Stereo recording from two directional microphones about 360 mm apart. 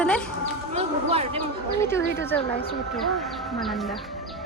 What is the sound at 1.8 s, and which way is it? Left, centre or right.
Speech, centre.